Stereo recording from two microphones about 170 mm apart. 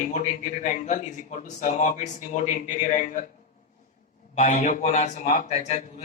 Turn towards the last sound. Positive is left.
turn(degrees=40)  # may be behind; listen again after turning